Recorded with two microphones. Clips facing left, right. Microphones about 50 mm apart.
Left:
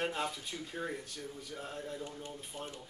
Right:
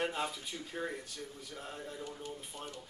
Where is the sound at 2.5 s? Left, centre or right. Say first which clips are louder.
Left 6 dB; left.